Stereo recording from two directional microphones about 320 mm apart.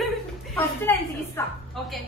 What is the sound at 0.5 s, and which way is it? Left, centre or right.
Speech, centre.